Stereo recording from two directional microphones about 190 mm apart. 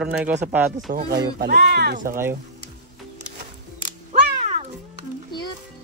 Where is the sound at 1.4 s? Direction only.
55° right (ahead or behind).